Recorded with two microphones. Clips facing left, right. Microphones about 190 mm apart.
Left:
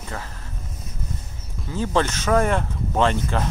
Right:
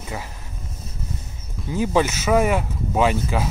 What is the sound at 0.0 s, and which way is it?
Speech, 10° right (ahead or behind).